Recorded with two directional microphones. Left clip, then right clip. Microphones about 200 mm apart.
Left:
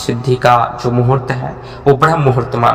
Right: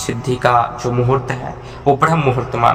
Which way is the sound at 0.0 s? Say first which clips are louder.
Left 4 dB; 20° left (ahead or behind).